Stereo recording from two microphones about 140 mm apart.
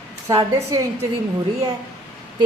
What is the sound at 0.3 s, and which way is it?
Speech, 25° right (ahead or behind).